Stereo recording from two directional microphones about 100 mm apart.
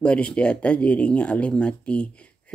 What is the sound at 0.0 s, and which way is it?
Speech, 10° left (ahead or behind).